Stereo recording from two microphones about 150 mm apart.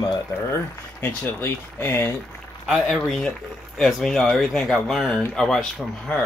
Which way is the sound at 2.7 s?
5° right (ahead or behind).